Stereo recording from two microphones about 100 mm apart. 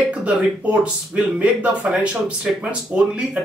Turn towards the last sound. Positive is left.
turn(degrees=-10)  # may be behind; listen again after turning